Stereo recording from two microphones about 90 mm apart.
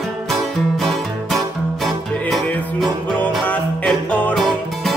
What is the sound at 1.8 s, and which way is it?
Music, centre (ahead or behind).